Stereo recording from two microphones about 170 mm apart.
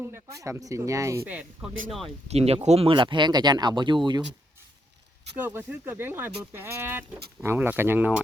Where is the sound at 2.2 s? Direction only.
40° right (ahead or behind).